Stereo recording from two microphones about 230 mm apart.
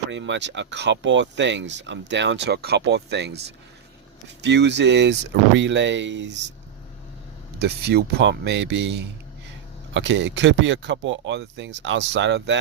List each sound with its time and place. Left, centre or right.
0.1 s speech: right
7.6 s speech: right